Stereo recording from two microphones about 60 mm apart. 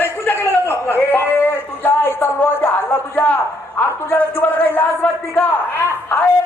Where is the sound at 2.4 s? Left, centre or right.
Left.